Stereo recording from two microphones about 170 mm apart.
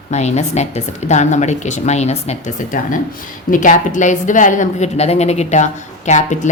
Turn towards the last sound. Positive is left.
turn(degrees=45)  # may be behind; listen again after turning